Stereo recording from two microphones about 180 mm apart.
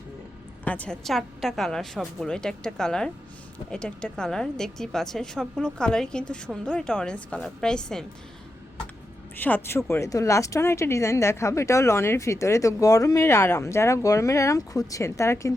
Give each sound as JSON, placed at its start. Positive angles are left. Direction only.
{"t": 0.6, "sound": "a woman's voice", "side_deg": 10}
{"t": 9.3, "sound": "speech", "side_deg": 10}